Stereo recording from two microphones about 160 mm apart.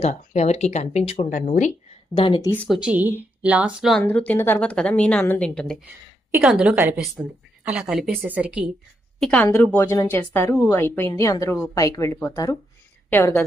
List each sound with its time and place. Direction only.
0.0 s speech: 45° left (ahead or behind)
2.1 s speech: 30° left (ahead or behind)
2.6 s speech: 5° right (ahead or behind)
4.0 s a woman's voice: 10° left (ahead or behind)
6.3 s a woman's voice: 5° right (ahead or behind)
9.1 s a woman's voice: 5° left (ahead or behind)